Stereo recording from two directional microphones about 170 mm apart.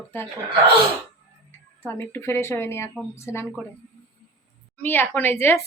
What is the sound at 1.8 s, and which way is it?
Speech, 15° left (ahead or behind).